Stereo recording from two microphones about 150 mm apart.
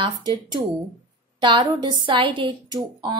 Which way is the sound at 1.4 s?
30° right (ahead or behind).